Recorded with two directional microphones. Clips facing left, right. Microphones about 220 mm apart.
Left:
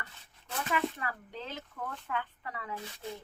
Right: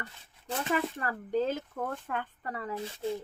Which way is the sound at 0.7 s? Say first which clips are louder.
Right 2 dB; 45° right (ahead or behind).